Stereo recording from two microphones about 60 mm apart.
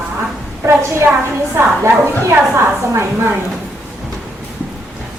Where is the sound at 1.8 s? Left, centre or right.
Right.